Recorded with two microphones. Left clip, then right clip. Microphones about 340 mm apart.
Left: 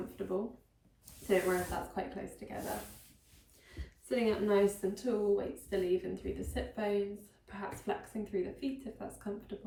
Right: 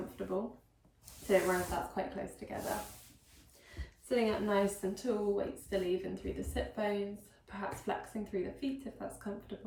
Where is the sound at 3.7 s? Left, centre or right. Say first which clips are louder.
Right 2 dB; centre.